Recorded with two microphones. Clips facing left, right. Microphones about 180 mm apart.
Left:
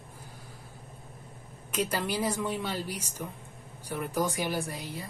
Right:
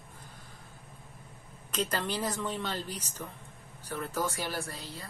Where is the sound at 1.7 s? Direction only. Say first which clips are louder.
Left 2 dB; 10° left (ahead or behind).